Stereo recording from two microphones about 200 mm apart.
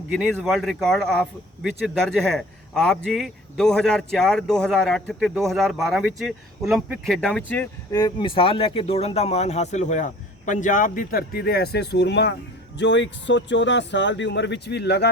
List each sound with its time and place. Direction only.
0.1 s speech: centre (ahead or behind); by 15.1 s 55° left (ahead or behind)